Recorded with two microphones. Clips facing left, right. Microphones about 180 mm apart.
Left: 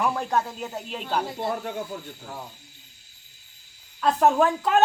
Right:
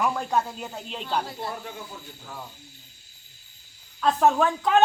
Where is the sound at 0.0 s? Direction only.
Centre (ahead or behind).